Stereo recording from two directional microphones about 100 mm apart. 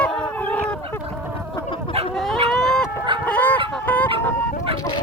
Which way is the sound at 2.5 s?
5° left (ahead or behind).